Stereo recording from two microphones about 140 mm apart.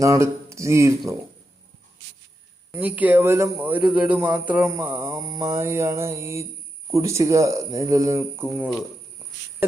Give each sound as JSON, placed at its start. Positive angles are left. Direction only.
{"t": 0.0, "sound": "mantra", "side_deg": -20}
{"t": 2.7, "sound": "speech", "side_deg": -10}
{"t": 3.9, "sound": "mantra", "side_deg": -10}